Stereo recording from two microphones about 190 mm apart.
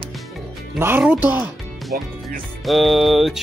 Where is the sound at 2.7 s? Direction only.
Centre (ahead or behind).